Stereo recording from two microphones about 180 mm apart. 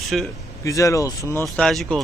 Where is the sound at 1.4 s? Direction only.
Centre (ahead or behind).